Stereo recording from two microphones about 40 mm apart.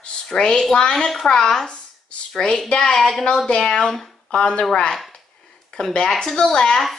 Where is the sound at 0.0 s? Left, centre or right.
Centre.